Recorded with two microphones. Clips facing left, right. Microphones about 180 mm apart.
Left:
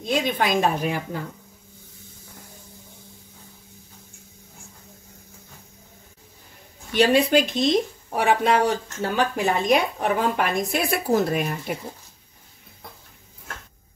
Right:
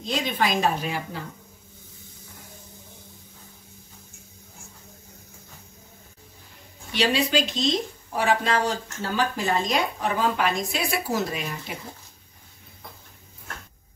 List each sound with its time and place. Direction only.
0.0 s speech: 55° left (ahead or behind)
6.9 s speech: 50° left (ahead or behind)